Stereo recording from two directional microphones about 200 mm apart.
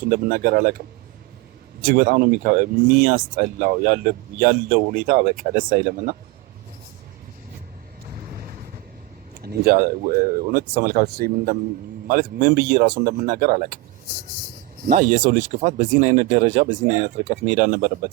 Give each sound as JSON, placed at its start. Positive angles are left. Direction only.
{"t": 0.0, "sound": "speech", "side_deg": -45}
{"t": 1.8, "sound": "speech", "side_deg": -45}
{"t": 8.3, "sound": "vehicle", "side_deg": -50}
{"t": 9.3, "sound": "speech", "side_deg": -50}
{"t": 14.8, "sound": "speech", "side_deg": -40}